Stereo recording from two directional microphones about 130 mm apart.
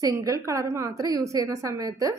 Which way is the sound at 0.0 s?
25° right (ahead or behind).